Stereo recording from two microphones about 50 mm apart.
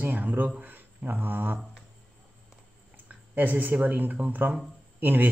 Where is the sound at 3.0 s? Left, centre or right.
Right.